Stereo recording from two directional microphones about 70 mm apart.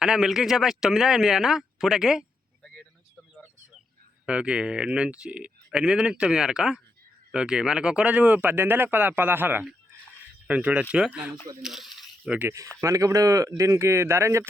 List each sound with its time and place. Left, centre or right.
0.0 s speech: centre
4.3 s speech: centre
11.6 s a sound: centre
12.2 s speech: right
12.8 s speech: right